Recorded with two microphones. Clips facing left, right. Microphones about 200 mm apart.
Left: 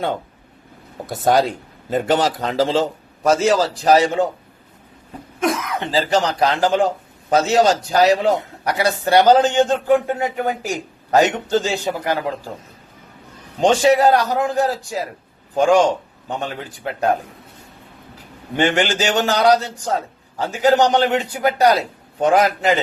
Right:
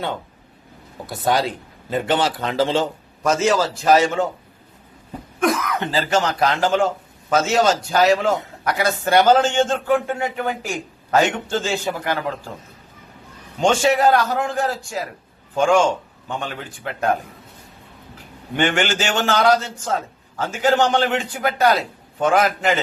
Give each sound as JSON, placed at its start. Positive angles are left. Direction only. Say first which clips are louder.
{"t": 1.0, "sound": "a man's voice", "louder": "left 4 dB", "side_deg": 45}
{"t": 5.9, "sound": "a man's voice", "louder": "left 3 dB", "side_deg": 35}
{"t": 13.6, "sound": "a man's voice", "louder": "left 3 dB", "side_deg": 35}
{"t": 14.7, "sound": "a man's voice", "louder": "left 3 dB", "side_deg": 20}
{"t": 15.5, "sound": "a man's voice", "louder": "left 2 dB", "side_deg": 35}
{"t": 18.5, "sound": "a man's voice", "louder": "left 2 dB", "side_deg": 35}